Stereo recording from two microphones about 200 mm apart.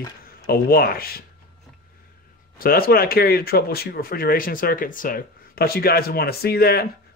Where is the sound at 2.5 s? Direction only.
50° left (ahead or behind).